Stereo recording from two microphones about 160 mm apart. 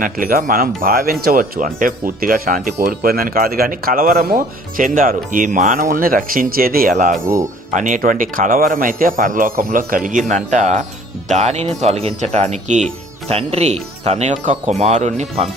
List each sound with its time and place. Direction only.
0.0 s speech: 60° right (ahead or behind); by 15.4 s 45° right (ahead or behind)